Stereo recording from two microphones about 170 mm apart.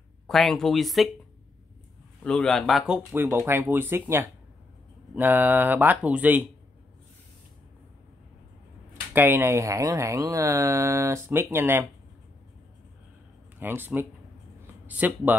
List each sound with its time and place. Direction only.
0.3 s speech: centre (ahead or behind)
2.2 s speech: 5° left (ahead or behind)
3.1 s speech: 15° right (ahead or behind)
9.1 s speech: 15° right (ahead or behind)
13.6 s speech: 10° right (ahead or behind)